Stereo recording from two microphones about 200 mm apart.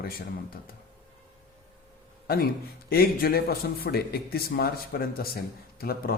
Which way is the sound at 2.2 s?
50° left (ahead or behind).